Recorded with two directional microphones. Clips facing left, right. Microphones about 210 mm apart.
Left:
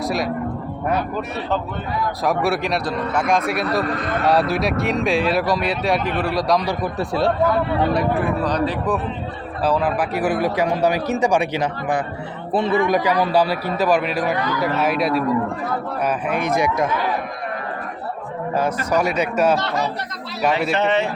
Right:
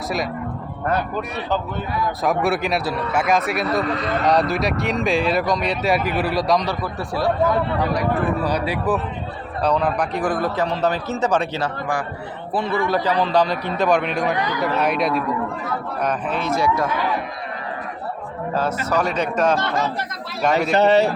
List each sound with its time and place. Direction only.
2.2 s a man's voice: centre (ahead or behind)
3.9 s speech: 50° left (ahead or behind)
4.3 s a man's voice: centre (ahead or behind)
6.7 s speech: 20° left (ahead or behind)
8.4 s speech: 10° right (ahead or behind)
9.6 s a man's voice: 5° left (ahead or behind)
16.0 s a man's voice: 15° left (ahead or behind)
18.5 s a man's voice: 15° left (ahead or behind)
19.5 s speech: 50° right (ahead or behind)
20.7 s a man's voice: 40° right (ahead or behind)